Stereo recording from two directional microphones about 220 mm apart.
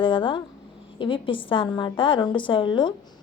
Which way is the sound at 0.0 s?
20° left (ahead or behind).